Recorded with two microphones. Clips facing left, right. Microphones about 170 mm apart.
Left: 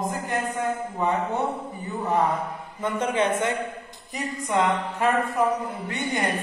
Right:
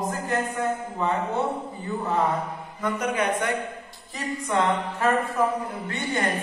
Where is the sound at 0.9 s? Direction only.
15° left (ahead or behind).